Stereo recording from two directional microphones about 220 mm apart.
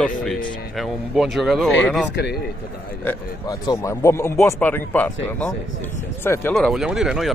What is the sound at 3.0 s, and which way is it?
A man's voice, 15° left (ahead or behind).